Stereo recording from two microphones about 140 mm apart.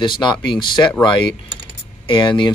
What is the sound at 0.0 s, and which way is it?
Speech, 35° left (ahead or behind).